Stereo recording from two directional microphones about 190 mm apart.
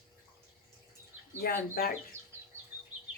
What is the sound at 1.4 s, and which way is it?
Speech, 50° left (ahead or behind).